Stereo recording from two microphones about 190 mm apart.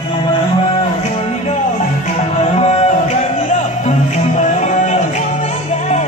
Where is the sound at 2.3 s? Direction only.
35° left (ahead or behind).